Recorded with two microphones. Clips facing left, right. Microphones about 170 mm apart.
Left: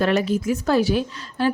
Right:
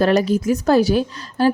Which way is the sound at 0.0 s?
40° right (ahead or behind).